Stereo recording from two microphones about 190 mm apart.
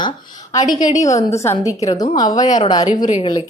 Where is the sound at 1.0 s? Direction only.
15° left (ahead or behind); by 3.3 s 30° left (ahead or behind).